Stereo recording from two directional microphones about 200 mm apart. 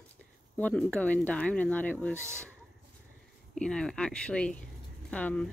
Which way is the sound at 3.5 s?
5° left (ahead or behind).